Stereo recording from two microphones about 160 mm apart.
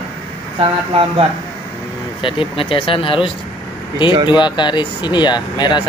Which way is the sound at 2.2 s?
35° left (ahead or behind).